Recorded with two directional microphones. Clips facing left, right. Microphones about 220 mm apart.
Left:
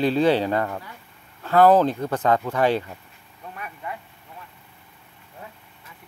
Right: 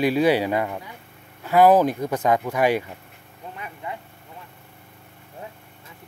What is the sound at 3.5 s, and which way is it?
Vehicle, 20° right (ahead or behind).